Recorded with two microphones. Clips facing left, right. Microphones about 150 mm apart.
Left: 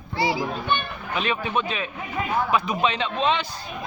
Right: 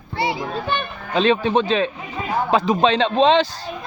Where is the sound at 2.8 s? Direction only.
90° right.